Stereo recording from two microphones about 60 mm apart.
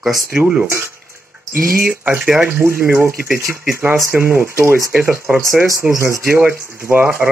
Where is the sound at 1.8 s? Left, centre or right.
Right.